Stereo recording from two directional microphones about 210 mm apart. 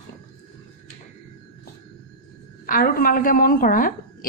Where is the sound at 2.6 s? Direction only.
40° left (ahead or behind).